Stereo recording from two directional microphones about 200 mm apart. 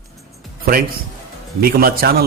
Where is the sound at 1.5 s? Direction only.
50° right (ahead or behind).